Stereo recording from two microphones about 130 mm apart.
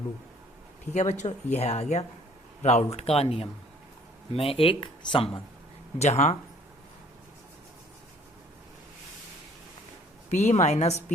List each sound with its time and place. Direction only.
0.9 s speech: 60° left (ahead or behind); by 5.4 s 40° left (ahead or behind)
6.0 s speech: 60° left (ahead or behind)
10.2 s speech: 60° left (ahead or behind)